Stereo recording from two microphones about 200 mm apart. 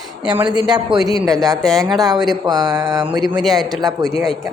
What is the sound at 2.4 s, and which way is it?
Speech, 20° right (ahead or behind).